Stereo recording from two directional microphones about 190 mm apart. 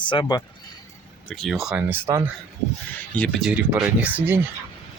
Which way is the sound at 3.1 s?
5° left (ahead or behind).